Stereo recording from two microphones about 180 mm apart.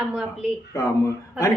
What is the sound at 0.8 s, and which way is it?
Speech, 15° left (ahead or behind).